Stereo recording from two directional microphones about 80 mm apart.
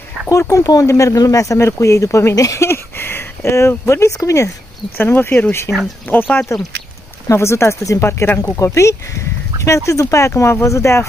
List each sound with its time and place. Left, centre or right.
0.3 s speech: left
4.9 s speech: left
7.2 s speech: left